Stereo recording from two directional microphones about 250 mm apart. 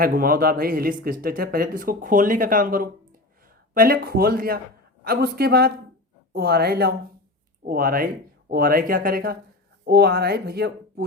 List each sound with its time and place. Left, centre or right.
0.0 s speech: right